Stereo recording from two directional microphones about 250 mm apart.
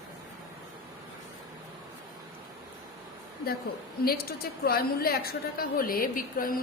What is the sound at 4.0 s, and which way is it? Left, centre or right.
A woman's voice, left.